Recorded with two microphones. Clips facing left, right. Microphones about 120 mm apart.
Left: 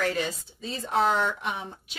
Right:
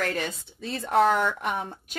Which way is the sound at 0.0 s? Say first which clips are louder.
Left 1 dB; 55° right (ahead or behind).